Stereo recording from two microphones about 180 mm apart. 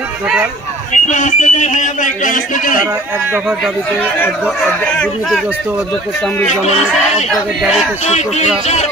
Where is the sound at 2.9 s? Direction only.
10° right (ahead or behind).